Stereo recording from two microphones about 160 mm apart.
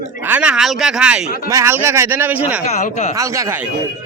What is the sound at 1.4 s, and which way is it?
Speech, 15° right (ahead or behind).